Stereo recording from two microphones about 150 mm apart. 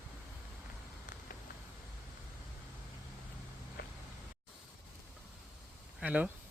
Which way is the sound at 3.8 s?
90° left.